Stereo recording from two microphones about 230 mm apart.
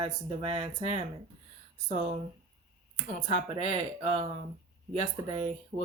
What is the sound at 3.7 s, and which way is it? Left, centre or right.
Speech, right.